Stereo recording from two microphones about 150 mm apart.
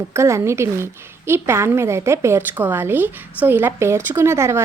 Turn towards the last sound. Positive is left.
turn(degrees=-20)  # may be behind; listen again after turning